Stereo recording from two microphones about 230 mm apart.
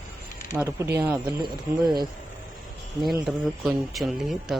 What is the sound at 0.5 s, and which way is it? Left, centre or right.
Speech, centre.